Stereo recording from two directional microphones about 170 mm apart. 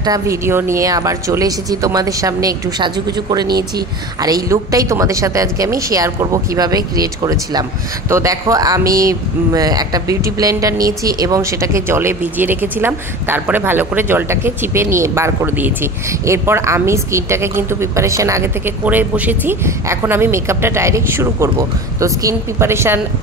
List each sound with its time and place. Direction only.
0.0 s speech: 20° right (ahead or behind)
3.4 s speech: 65° right (ahead or behind)
4.2 s speech: 20° right (ahead or behind)